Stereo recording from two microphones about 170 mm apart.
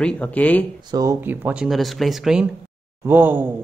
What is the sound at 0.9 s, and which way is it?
Speech, 20° right (ahead or behind).